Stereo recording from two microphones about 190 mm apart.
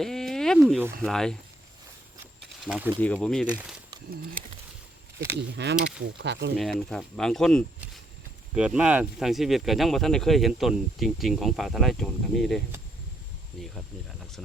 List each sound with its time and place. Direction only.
0.0 s a sound: centre (ahead or behind)
1.0 s speech: centre (ahead or behind)
2.4 s mechanisms: 5° right (ahead or behind)
3.0 s speech: 5° left (ahead or behind)
5.4 s speech: 65° right (ahead or behind)
6.6 s speech: centre (ahead or behind)